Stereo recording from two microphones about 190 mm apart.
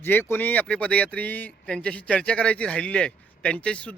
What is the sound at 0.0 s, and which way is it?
Speech, 10° left (ahead or behind).